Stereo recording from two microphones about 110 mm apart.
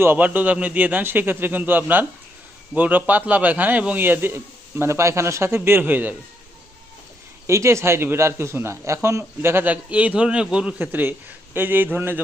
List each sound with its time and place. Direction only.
0.0 s a man's voice: 15° right (ahead or behind)
7.4 s a man's voice: 25° right (ahead or behind)